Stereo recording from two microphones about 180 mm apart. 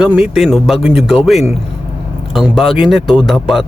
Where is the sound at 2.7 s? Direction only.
Centre (ahead or behind).